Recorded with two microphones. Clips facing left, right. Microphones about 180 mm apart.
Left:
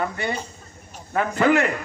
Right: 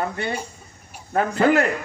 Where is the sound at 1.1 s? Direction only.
40° right (ahead or behind).